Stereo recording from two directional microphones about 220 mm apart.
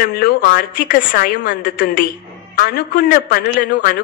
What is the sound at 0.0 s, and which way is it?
A man's voice, 40° left (ahead or behind).